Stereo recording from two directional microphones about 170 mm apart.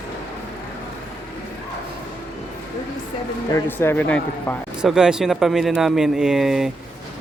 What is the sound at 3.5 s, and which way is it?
Speech, 15° left (ahead or behind).